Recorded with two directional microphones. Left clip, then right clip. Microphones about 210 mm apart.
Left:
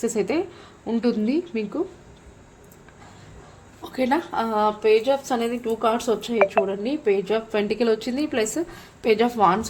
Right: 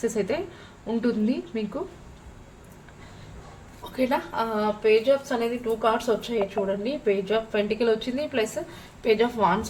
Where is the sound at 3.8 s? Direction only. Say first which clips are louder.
Left 2 dB; 45° left (ahead or behind).